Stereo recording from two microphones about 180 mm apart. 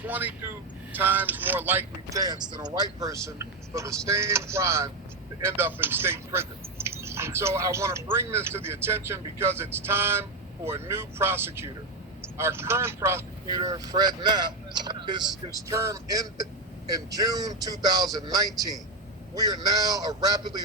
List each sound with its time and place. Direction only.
0.0 s speech: 10° right (ahead or behind)